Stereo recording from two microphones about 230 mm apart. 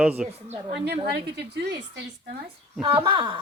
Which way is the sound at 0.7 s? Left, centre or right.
Right.